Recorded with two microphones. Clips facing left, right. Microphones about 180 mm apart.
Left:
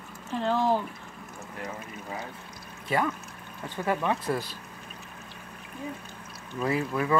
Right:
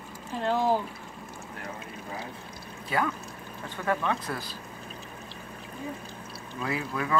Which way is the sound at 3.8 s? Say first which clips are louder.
Left 1 dB; 25° left (ahead or behind).